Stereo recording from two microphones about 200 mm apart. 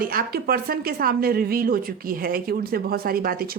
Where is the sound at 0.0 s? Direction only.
45° right (ahead or behind).